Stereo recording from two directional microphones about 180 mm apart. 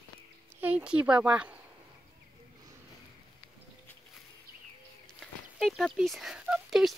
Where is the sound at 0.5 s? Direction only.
10° right (ahead or behind).